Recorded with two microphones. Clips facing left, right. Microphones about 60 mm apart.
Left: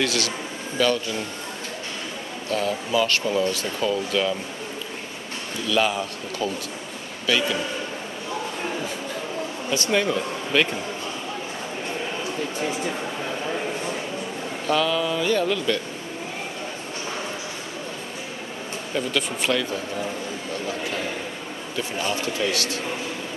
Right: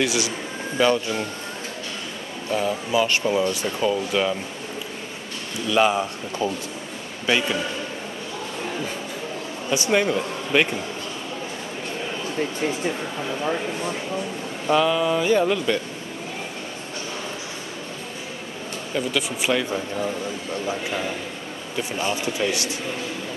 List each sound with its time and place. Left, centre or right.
0.0 s speech: centre
2.5 s speech: centre
5.7 s speech: right
9.7 s speech: centre
14.7 s speech: centre
18.9 s speech: centre
22.0 s speech: right